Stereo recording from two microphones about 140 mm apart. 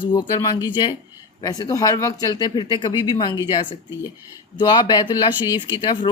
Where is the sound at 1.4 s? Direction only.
25° left (ahead or behind).